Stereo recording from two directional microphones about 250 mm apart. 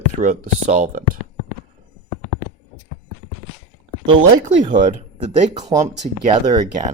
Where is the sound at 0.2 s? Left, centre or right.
Right.